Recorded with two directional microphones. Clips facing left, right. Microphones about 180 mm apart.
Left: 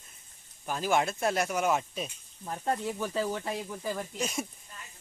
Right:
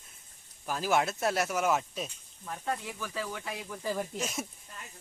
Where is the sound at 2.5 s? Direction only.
40° left (ahead or behind).